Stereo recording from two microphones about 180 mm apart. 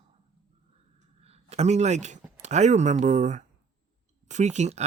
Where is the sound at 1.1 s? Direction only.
35° right (ahead or behind).